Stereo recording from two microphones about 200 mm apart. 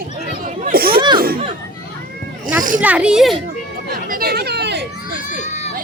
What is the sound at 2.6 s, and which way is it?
Speech, 40° right (ahead or behind).